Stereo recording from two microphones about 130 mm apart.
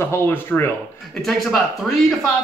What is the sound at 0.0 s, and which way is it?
Speech, 20° left (ahead or behind).